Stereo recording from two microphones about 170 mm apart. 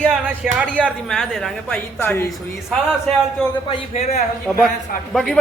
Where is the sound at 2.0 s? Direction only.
15° left (ahead or behind).